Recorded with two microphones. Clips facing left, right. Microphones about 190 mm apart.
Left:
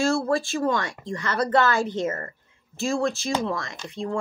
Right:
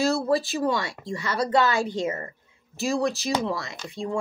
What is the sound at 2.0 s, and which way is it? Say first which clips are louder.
Speech: left 1 dB; 10° right (ahead or behind).